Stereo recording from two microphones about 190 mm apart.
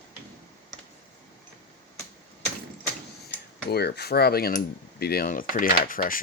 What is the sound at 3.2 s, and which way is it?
Speech, 60° left (ahead or behind).